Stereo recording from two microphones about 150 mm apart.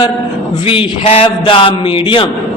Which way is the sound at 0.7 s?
40° left (ahead or behind).